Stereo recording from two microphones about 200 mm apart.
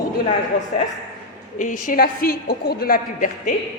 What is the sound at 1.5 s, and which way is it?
A woman's voice, 40° left (ahead or behind).